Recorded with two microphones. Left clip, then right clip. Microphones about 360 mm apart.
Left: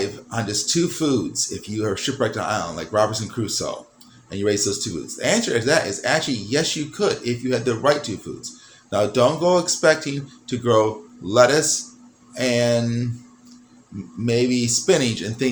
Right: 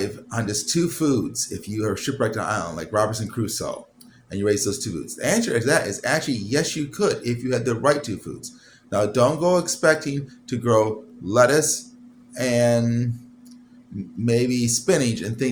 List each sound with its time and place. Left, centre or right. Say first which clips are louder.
0.3 s speech: left 2 dB; right
14.3 s speech: left 1 dB; right